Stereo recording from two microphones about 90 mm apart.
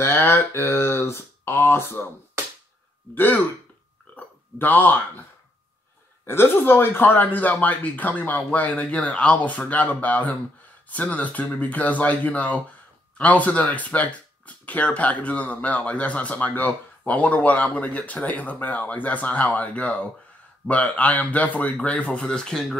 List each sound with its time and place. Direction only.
0.0 s speech: 25° left (ahead or behind)
3.2 s speech: 20° left (ahead or behind)
6.2 s speech: 25° left (ahead or behind); by 22.8 s 5° left (ahead or behind)